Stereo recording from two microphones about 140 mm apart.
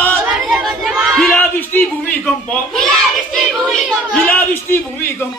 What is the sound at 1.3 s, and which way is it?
Speech, 15° left (ahead or behind).